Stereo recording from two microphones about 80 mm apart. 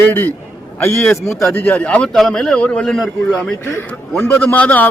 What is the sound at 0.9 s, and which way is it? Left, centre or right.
Speech, centre.